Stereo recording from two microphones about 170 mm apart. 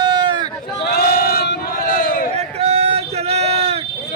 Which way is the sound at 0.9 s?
65° left (ahead or behind).